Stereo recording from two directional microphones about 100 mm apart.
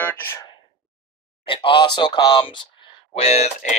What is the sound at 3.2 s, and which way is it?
Speech, 90° left.